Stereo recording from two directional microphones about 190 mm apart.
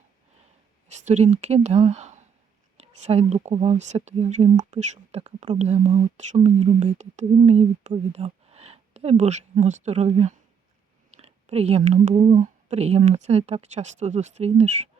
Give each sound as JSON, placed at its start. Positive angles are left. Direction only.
{"t": 0.9, "sound": "speech", "side_deg": -35}